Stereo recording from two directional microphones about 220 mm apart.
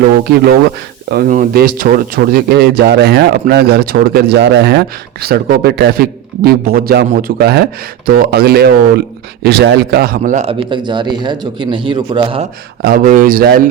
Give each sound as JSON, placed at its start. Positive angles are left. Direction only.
{"t": 1.0, "sound": "speech", "side_deg": -45}
{"t": 12.8, "sound": "speech", "side_deg": -40}